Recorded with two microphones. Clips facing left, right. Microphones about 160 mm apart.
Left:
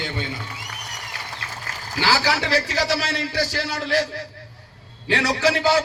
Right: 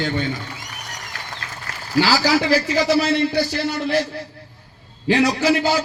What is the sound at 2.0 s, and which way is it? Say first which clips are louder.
A man's voice: right 5 dB; 60° left (ahead or behind).